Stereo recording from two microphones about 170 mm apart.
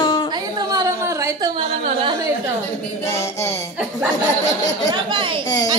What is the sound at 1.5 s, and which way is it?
Speech, 30° right (ahead or behind).